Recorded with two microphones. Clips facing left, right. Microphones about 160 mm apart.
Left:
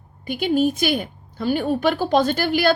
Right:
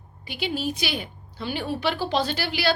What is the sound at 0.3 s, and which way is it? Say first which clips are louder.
A woman's voice: left 9 dB; 50° left (ahead or behind).